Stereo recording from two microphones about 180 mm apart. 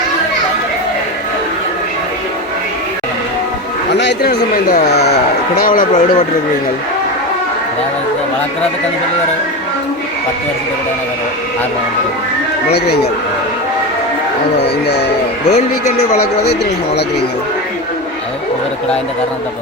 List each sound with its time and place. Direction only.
3.9 s speech: 70° left (ahead or behind)
5.5 s speech: 50° left (ahead or behind)
15.4 s speech: 40° left (ahead or behind)
16.2 s speech: 65° left (ahead or behind)